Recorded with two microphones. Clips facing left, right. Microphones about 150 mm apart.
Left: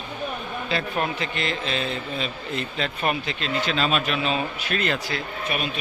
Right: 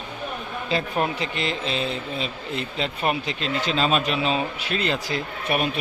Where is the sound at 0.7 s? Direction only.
25° right (ahead or behind).